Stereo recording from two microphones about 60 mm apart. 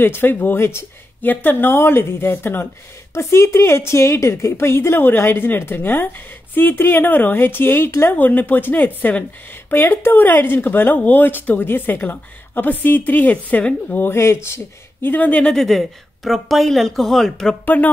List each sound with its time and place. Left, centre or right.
0.0 s a woman's voice: left
1.2 s a woman's voice: left
4.9 s a woman's voice: left
13.9 s a woman's voice: left
15.1 s speech: left
15.5 s a woman's voice: centre